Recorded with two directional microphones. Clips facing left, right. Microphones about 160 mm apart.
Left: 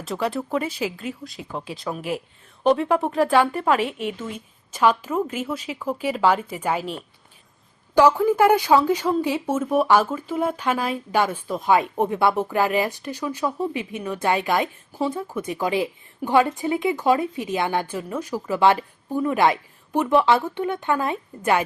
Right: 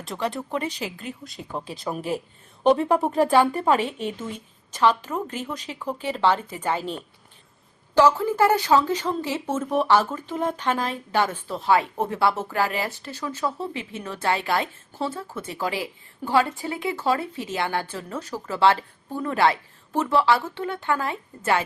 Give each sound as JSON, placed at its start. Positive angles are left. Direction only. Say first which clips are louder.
{"t": 0.0, "sound": "speech", "louder": "left 3 dB", "side_deg": 0}
{"t": 3.7, "sound": "a woman's voice", "louder": "left 1 dB", "side_deg": -30}
{"t": 4.7, "sound": "speech", "louder": "left 2 dB", "side_deg": 10}